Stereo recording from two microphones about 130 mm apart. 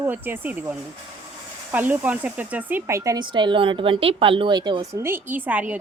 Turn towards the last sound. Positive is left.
turn(degrees=-10)  # may be behind; listen again after turning